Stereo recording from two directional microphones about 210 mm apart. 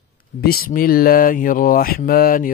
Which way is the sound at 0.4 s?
45° left (ahead or behind).